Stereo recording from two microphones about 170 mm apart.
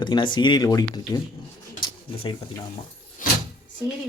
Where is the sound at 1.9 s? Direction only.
30° left (ahead or behind).